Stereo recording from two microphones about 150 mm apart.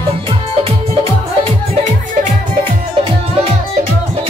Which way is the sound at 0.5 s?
40° right (ahead or behind).